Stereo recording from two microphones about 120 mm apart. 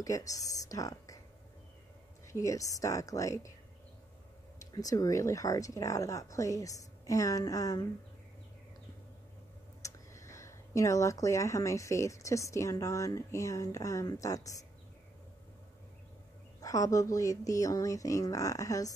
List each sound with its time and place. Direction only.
0.0 s speech: 30° left (ahead or behind)
2.2 s speech: 25° left (ahead or behind)
4.7 s speech: 30° left (ahead or behind)
9.8 s speech: 25° left (ahead or behind)
16.6 s speech: 30° left (ahead or behind)